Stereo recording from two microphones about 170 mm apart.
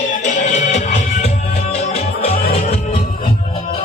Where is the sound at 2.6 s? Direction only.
50° left (ahead or behind).